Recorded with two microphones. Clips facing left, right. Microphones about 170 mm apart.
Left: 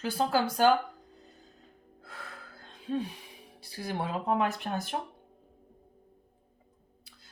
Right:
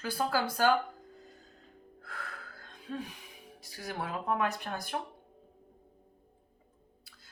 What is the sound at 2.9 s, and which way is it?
Speech, 30° left (ahead or behind).